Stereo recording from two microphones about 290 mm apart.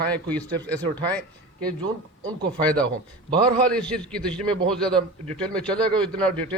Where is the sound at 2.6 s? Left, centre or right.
Centre.